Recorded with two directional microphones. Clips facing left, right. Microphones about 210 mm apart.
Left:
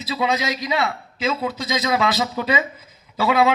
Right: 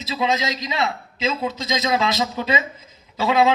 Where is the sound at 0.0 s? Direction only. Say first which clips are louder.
Even; 20° right (ahead or behind).